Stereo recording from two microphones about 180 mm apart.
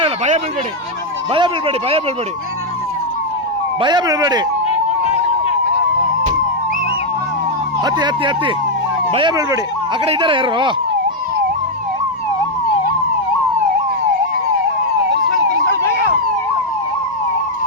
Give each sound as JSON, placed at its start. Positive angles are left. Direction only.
{"t": 1.3, "sound": "speech", "side_deg": -30}
{"t": 3.8, "sound": "speech", "side_deg": -25}
{"t": 4.7, "sound": "a sound", "side_deg": 35}
{"t": 7.9, "sound": "speech", "side_deg": -25}